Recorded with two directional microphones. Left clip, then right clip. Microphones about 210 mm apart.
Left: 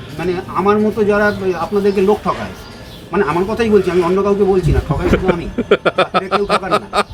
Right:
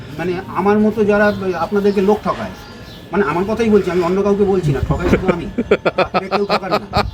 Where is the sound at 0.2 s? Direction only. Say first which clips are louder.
Left 2 dB; centre (ahead or behind).